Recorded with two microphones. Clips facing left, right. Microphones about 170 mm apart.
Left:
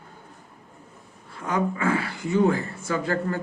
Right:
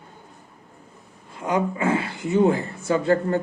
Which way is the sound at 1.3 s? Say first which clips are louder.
Right 2 dB; 20° right (ahead or behind).